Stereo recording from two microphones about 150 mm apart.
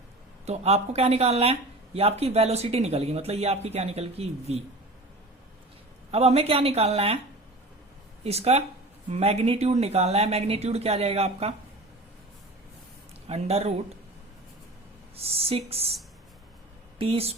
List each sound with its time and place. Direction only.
0.4 s speech: 45° right (ahead or behind)
6.1 s speech: 45° right (ahead or behind)
8.2 s speech: 45° right (ahead or behind)
13.2 s speech: 40° right (ahead or behind)
15.1 s speech: 40° right (ahead or behind)
17.0 s speech: 40° right (ahead or behind)